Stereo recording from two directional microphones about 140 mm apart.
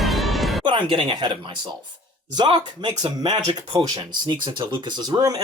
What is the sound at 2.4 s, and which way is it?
Speech, 30° right (ahead or behind).